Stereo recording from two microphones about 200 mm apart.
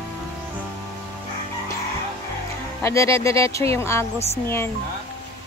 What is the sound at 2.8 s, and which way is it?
Speech, 15° left (ahead or behind).